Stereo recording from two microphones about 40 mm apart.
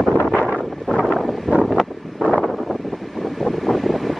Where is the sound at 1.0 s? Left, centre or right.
Centre.